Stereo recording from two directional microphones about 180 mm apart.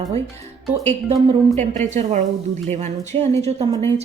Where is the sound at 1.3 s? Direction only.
40° right (ahead or behind).